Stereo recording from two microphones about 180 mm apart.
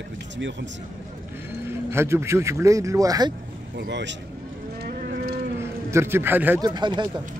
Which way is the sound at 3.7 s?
75° right (ahead or behind).